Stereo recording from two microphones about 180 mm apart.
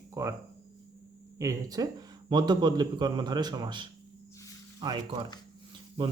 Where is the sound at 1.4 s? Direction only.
20° right (ahead or behind).